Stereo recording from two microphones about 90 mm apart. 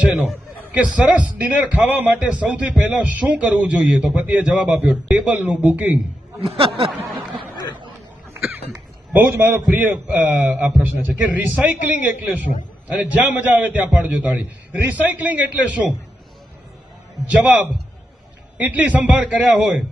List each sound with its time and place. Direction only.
0.0 s a man's voice: 10° right (ahead or behind)
6.4 s speech: 90° right
8.4 s a sound: 20° right (ahead or behind)
9.1 s a man's voice: 20° right (ahead or behind)
17.2 s a man's voice: 15° right (ahead or behind)